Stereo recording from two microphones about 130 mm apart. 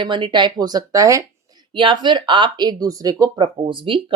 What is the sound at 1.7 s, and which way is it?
Speech, 40° right (ahead or behind).